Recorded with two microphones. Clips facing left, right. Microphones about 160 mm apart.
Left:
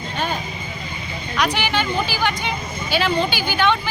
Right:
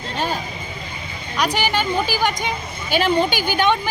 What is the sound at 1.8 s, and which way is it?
Speech, 45° right (ahead or behind).